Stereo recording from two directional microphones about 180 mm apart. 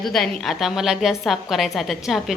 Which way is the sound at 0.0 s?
Centre (ahead or behind).